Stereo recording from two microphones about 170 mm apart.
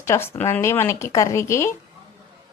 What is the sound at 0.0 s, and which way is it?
A woman's voice, 15° left (ahead or behind).